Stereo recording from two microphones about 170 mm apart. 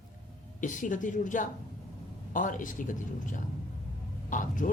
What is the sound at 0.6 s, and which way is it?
Speech, 50° left (ahead or behind).